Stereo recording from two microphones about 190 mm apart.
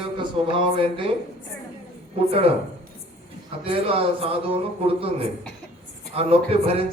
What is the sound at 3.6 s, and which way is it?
A man's voice, 30° right (ahead or behind).